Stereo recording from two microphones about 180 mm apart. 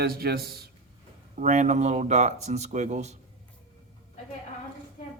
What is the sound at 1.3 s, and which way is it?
Speech, 40° right (ahead or behind).